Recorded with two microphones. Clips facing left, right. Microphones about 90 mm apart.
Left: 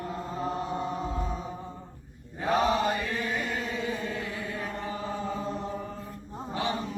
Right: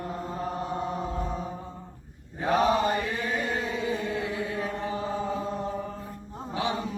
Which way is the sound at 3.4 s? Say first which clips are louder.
Right 3 dB; 40° right (ahead or behind).